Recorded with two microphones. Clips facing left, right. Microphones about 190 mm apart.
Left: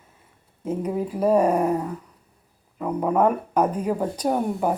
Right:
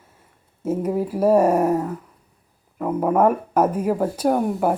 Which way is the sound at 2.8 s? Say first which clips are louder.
Right 3 dB; 5° right (ahead or behind).